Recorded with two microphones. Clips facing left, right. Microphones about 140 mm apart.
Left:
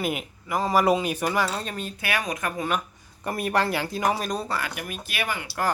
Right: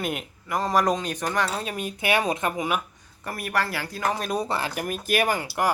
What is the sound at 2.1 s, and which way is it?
Speech, 25° right (ahead or behind).